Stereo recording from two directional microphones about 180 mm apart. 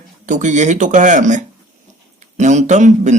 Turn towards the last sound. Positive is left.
turn(degrees=-40)  # may be behind; listen again after turning